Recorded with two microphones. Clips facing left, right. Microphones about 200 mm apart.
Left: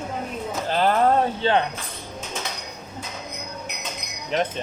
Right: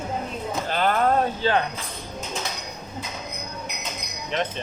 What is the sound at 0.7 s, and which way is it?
Speech, 30° left (ahead or behind).